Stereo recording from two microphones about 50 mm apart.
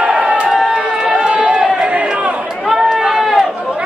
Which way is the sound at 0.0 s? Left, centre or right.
Right.